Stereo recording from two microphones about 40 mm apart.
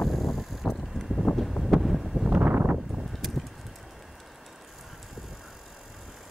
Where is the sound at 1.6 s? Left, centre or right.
Centre.